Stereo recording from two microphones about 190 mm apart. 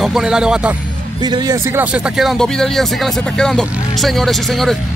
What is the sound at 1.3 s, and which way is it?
Speech, 20° right (ahead or behind).